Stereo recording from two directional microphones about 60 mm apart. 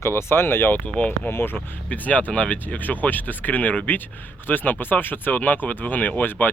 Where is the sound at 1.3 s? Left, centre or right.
Left.